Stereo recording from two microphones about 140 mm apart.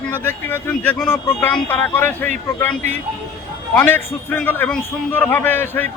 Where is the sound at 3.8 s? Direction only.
15° left (ahead or behind).